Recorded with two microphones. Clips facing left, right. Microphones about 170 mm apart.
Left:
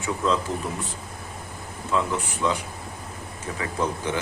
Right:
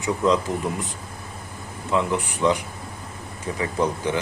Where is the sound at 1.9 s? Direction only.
15° right (ahead or behind).